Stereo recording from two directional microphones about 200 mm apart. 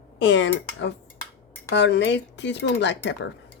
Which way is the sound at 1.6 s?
60° left (ahead or behind).